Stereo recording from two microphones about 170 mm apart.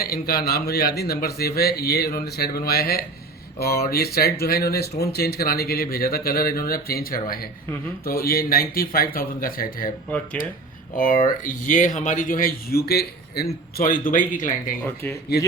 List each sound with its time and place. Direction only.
0.0 s speech: 60° left (ahead or behind)
10.9 s speech: 50° left (ahead or behind); by 13.5 s 70° left (ahead or behind)
13.7 s speech: 55° left (ahead or behind)
15.0 s speech: 10° left (ahead or behind)